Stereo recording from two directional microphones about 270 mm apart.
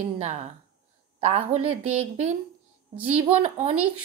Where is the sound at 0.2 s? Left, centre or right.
Right.